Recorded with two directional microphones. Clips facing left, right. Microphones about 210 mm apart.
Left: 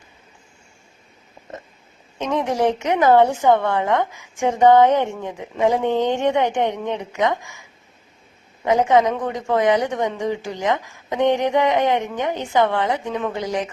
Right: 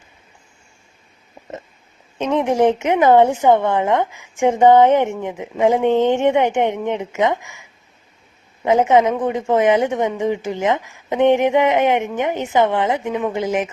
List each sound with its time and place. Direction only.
2.1 s speech: 20° right (ahead or behind)
8.6 s speech: 20° right (ahead or behind)